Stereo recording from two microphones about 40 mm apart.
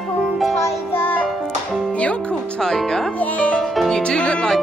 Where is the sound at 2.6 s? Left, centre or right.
Centre.